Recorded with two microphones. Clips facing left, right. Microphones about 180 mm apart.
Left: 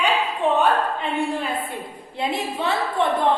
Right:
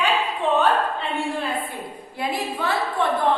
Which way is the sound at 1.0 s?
15° left (ahead or behind).